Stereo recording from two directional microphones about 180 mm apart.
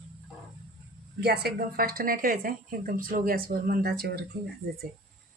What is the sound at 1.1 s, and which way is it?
Speech, 65° right (ahead or behind).